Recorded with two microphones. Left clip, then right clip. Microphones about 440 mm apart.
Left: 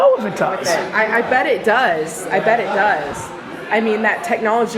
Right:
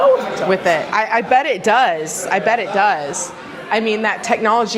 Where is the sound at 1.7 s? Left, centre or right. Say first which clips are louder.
Right 1 dB; right.